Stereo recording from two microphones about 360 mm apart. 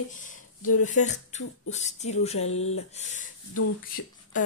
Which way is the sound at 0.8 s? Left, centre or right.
Centre.